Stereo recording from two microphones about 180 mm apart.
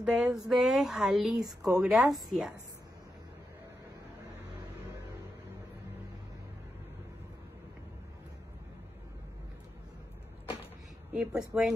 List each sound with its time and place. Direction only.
0.0 s a sound: 5° right (ahead or behind)
0.5 s speech: centre (ahead or behind)
1.4 s speech: 20° right (ahead or behind)
1.8 s speech: centre (ahead or behind)
11.1 s speech: 5° right (ahead or behind)